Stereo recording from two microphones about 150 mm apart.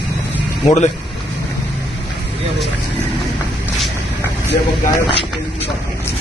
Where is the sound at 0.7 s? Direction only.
45° left (ahead or behind).